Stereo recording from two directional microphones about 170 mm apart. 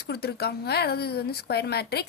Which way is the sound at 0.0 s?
70° left (ahead or behind).